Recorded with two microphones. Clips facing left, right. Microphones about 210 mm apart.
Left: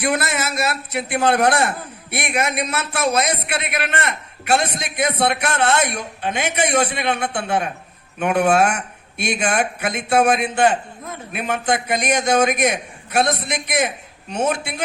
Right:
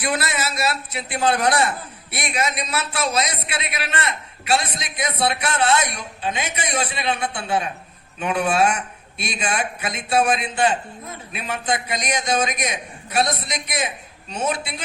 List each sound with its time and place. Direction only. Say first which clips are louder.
0.0 s a man's voice: left 3 dB; 50° left (ahead or behind)